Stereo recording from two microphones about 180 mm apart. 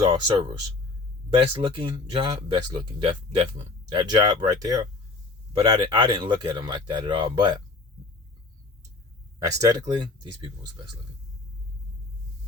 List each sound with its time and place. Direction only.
0.1 s speech: 25° right (ahead or behind)
1.5 s speech: 30° right (ahead or behind)
9.4 s speech: 20° right (ahead or behind)